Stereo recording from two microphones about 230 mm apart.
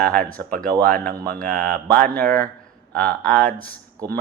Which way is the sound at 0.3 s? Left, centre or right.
Centre.